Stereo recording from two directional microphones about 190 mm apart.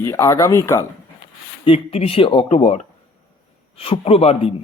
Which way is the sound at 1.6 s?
30° left (ahead or behind).